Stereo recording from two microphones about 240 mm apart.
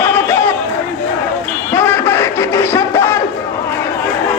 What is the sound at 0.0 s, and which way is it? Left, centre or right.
Chatter, centre.